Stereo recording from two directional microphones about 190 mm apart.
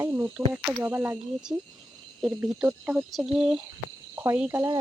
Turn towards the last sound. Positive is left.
turn(degrees=-10)  # may be behind; listen again after turning